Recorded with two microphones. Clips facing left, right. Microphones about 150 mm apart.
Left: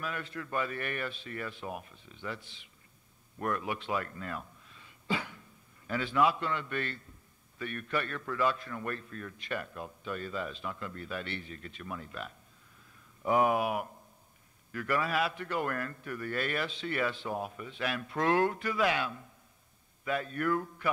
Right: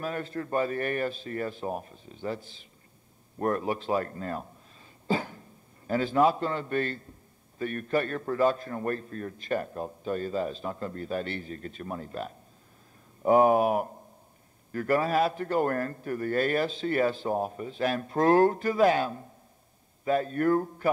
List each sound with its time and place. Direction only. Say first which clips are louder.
0.0 s a man's voice: right 6 dB; 40° right (ahead or behind)